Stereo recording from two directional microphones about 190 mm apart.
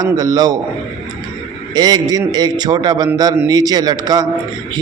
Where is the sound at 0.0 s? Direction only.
20° right (ahead or behind).